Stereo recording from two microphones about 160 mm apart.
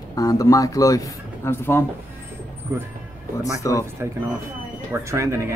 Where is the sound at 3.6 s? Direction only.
20° left (ahead or behind).